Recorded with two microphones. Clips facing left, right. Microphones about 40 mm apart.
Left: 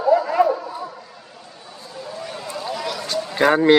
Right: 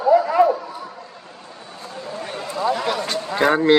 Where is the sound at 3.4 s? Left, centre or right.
Centre.